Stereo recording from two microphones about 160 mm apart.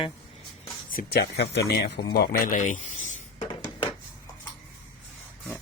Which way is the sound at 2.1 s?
65° left (ahead or behind).